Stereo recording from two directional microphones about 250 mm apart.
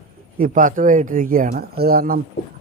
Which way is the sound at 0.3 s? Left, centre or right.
Right.